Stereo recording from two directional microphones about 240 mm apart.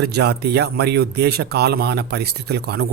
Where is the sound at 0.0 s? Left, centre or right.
Right.